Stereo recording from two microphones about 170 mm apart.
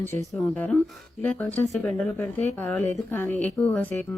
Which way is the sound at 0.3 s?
5° left (ahead or behind).